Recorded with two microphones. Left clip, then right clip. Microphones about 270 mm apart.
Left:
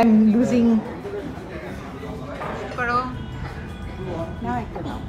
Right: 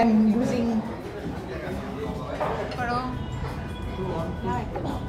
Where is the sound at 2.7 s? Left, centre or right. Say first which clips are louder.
Left 10 dB; centre.